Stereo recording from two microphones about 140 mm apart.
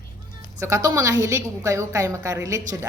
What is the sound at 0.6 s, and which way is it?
A woman's voice, 20° right (ahead or behind).